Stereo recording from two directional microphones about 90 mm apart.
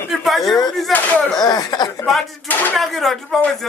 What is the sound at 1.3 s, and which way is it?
Speech, 45° left (ahead or behind).